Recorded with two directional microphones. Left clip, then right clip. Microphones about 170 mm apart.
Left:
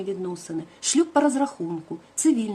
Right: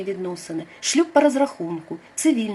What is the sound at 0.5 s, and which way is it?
Speech, 15° left (ahead or behind).